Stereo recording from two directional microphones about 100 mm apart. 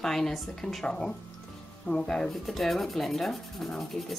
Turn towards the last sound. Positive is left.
turn(degrees=0)  # may be behind; listen again after turning